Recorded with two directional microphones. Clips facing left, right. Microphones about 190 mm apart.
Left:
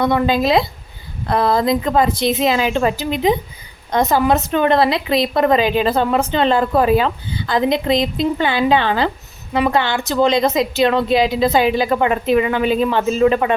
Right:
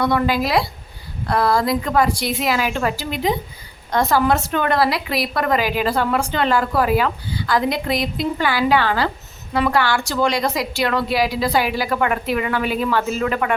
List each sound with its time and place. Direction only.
0.0 s a woman's voice: 20° left (ahead or behind)